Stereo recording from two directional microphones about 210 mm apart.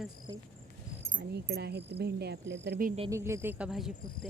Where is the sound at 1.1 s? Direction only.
50° right (ahead or behind).